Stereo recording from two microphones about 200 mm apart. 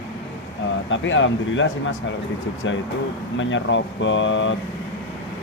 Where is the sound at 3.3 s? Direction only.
70° left (ahead or behind).